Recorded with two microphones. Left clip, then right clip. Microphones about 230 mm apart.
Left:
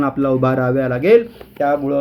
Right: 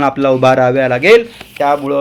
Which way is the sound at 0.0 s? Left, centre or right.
Centre.